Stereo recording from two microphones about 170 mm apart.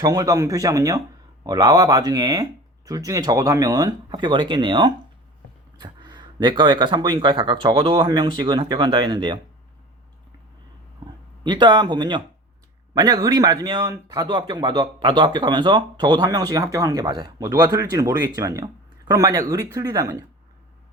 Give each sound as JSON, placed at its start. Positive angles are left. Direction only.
{"t": 0.0, "sound": "a man's voice", "side_deg": -20}
{"t": 11.0, "sound": "a man's voice", "side_deg": -25}